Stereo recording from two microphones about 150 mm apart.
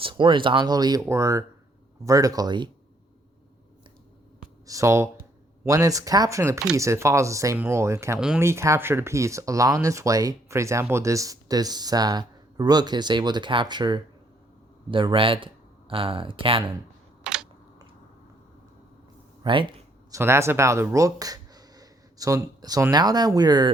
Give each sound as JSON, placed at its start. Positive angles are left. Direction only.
{"t": 0.0, "sound": "speech", "side_deg": -30}
{"t": 4.6, "sound": "speech", "side_deg": -20}
{"t": 17.2, "sound": "a sound", "side_deg": -5}
{"t": 19.4, "sound": "speech", "side_deg": -35}
{"t": 20.1, "sound": "speech", "side_deg": -20}